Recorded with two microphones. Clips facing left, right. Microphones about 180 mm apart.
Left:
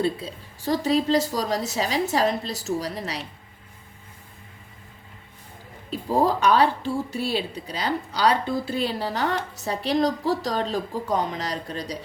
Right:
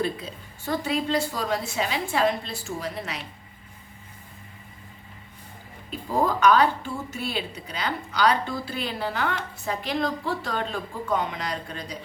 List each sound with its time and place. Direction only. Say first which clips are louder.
0.0 s speech: left 3 dB; 30° left (ahead or behind)
5.9 s speech: left 3 dB; 35° left (ahead or behind)